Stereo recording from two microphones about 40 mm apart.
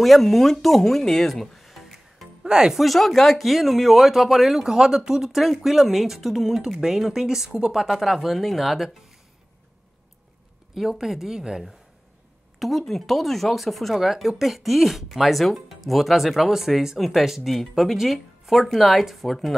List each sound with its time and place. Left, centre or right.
0.0 s speech: centre
2.4 s speech: centre
2.8 s speech: centre
10.7 s speech: centre
12.5 s speech: centre